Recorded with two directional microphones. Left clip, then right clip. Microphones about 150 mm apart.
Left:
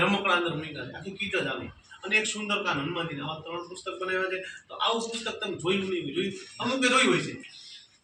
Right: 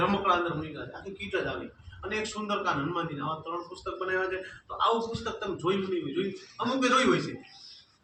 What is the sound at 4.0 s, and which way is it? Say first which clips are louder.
Speech: even; 5° left (ahead or behind).